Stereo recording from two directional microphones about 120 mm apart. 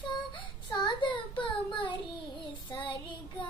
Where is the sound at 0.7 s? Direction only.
40° left (ahead or behind).